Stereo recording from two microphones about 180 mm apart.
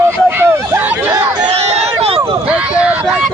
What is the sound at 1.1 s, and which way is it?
Chatter, 20° right (ahead or behind).